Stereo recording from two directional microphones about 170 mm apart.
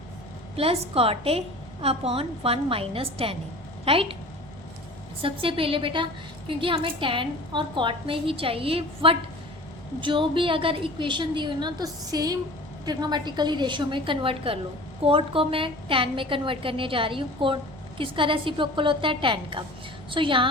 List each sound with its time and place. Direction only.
0.5 s a woman's voice: 35° right (ahead or behind)
5.2 s a woman's voice: 30° right (ahead or behind)